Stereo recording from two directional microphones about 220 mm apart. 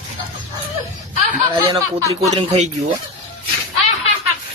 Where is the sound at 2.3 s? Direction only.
30° right (ahead or behind).